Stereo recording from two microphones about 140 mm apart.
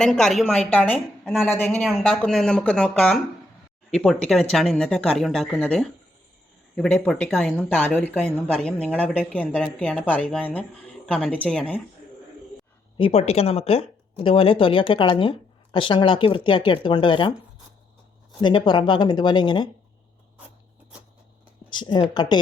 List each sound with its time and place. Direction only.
0.0 s speech: 5° left (ahead or behind)
0.9 s a woman's voice: 5° right (ahead or behind)
1.5 s speech: 15° left (ahead or behind)
1.8 s speech: centre (ahead or behind)
13.0 s speech: 45° left (ahead or behind)
18.3 s speech: 35° left (ahead or behind)
21.7 s speech: 35° left (ahead or behind)